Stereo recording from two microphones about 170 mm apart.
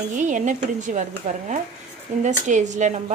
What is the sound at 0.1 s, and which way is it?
Speech, 45° right (ahead or behind).